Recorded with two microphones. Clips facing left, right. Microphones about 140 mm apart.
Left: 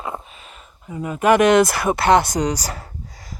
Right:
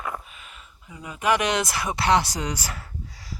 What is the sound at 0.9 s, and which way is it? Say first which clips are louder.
Speech: left 7 dB; 45° left (ahead or behind).